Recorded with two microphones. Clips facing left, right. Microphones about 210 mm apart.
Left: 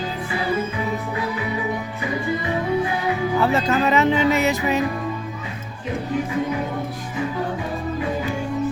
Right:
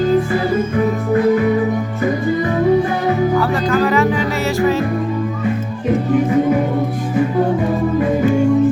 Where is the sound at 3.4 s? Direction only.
25° left (ahead or behind).